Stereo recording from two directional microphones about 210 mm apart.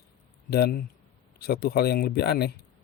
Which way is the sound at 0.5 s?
50° left (ahead or behind).